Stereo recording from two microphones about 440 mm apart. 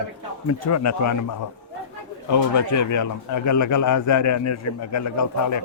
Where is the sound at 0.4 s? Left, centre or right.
Left.